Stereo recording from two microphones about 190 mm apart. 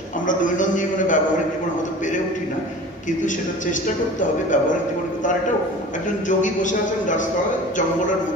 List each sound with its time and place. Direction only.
0.3 s a man's voice: 45° left (ahead or behind)
6.2 s a man's voice: 40° left (ahead or behind)